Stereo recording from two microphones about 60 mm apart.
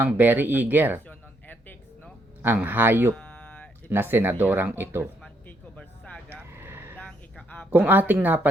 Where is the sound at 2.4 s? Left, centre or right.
Right.